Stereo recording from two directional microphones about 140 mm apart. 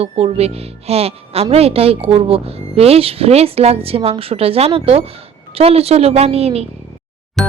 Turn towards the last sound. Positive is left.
turn(degrees=5)  # may be behind; listen again after turning